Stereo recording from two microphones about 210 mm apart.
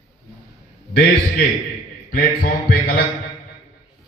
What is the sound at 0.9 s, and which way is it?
Speech, 45° left (ahead or behind).